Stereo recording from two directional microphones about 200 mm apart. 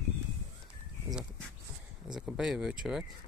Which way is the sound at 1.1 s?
Centre (ahead or behind).